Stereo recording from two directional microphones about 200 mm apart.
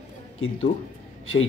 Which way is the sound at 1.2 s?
85° left.